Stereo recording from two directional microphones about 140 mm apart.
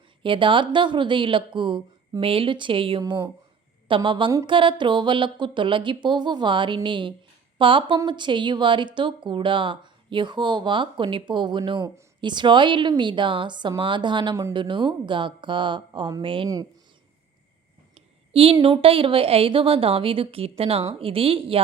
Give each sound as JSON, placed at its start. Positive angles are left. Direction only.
{"t": 0.2, "sound": "speech", "side_deg": -35}
{"t": 17.9, "sound": "a sound", "side_deg": -45}
{"t": 18.8, "sound": "speech", "side_deg": -40}